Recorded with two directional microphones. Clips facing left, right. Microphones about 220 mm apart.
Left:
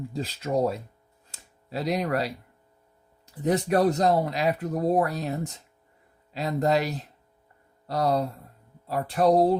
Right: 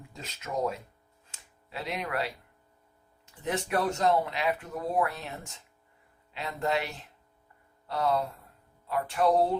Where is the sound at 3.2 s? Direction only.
40° left (ahead or behind).